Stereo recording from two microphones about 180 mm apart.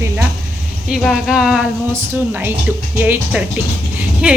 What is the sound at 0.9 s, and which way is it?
A woman's voice, centre (ahead or behind).